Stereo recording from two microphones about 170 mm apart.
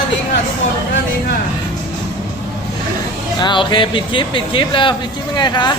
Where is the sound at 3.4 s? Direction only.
25° left (ahead or behind).